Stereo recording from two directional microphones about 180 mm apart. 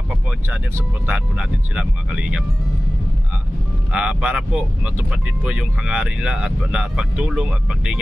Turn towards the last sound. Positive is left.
turn(degrees=-5)  # may be behind; listen again after turning